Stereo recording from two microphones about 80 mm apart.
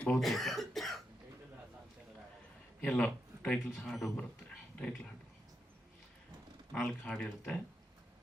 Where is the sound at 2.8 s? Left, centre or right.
Centre.